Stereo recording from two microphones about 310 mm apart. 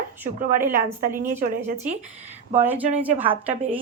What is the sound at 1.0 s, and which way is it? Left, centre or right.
Speech, right.